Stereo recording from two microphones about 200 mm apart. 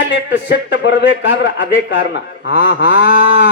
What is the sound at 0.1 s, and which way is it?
A man's voice, 60° left (ahead or behind).